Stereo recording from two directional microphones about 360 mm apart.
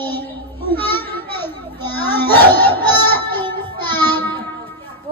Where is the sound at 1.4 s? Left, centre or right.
Centre.